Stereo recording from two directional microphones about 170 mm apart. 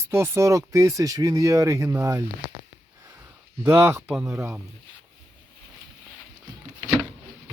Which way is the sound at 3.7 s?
15° right (ahead or behind).